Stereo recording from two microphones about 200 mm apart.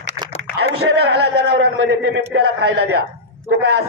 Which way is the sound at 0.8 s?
55° right (ahead or behind).